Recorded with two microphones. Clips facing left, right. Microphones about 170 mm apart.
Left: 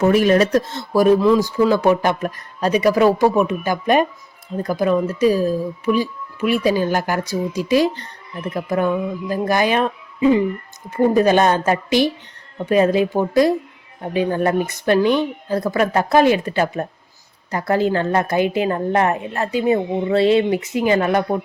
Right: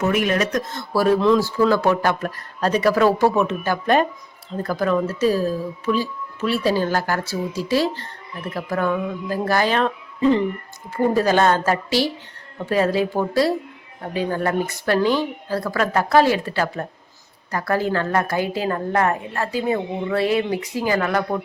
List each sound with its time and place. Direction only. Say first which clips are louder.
0.0 s a woman's voice: left 6 dB; 30° left (ahead or behind)